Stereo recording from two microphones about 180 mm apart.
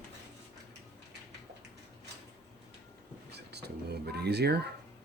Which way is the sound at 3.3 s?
65° right (ahead or behind).